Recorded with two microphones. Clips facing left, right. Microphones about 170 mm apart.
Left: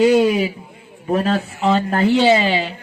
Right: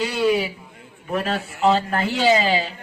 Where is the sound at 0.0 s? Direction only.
45° left (ahead or behind).